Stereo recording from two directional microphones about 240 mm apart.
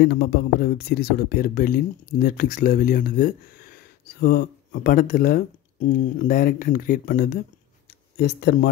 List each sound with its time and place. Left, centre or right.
0.0 s speech: left